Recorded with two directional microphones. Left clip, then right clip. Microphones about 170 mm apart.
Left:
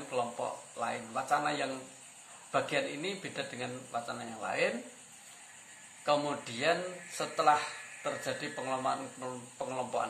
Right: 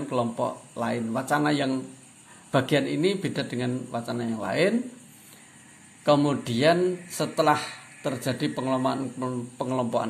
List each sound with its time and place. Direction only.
0.1 s a man's voice: 60° right (ahead or behind)
6.0 s a man's voice: 65° right (ahead or behind)